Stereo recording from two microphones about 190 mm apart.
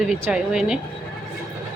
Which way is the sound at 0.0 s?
Centre (ahead or behind).